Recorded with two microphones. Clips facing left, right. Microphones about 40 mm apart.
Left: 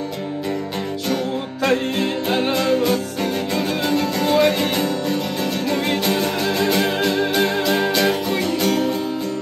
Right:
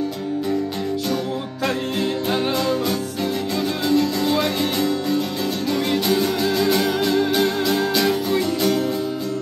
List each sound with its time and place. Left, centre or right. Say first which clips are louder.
2.2 s music: left 3 dB; left